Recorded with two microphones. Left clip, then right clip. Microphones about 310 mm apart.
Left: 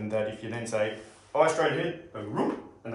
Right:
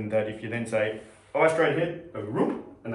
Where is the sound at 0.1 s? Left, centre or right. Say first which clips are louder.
Right 3 dB; centre.